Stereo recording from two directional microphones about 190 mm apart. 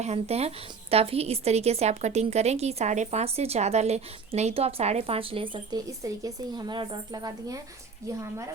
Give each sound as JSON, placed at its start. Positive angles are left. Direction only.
{"t": 0.0, "sound": "a woman's voice", "side_deg": -35}